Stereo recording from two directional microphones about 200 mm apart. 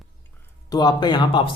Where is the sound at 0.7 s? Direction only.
20° left (ahead or behind).